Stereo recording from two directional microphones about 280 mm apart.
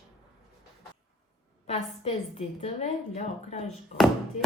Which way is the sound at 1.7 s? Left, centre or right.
Left.